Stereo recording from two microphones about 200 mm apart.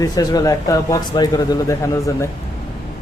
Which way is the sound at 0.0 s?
20° left (ahead or behind).